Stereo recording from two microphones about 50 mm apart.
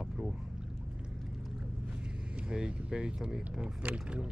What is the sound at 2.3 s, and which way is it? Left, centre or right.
Speech, centre.